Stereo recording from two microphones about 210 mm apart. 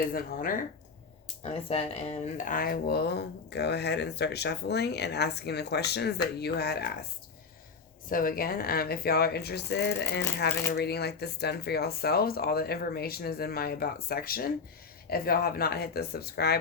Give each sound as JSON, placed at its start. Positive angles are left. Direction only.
{"t": 0.0, "sound": "speech", "side_deg": 40}
{"t": 1.6, "sound": "speech", "side_deg": 30}
{"t": 8.1, "sound": "speech", "side_deg": 40}